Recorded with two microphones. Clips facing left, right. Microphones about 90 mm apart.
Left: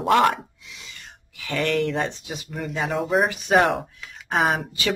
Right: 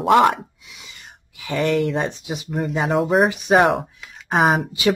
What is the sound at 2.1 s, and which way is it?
Speech, 15° right (ahead or behind).